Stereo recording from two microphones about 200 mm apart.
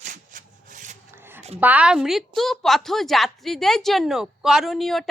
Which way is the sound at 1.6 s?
5° right (ahead or behind).